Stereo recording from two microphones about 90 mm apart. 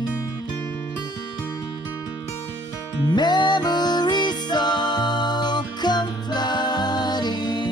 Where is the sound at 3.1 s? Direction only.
55° left (ahead or behind).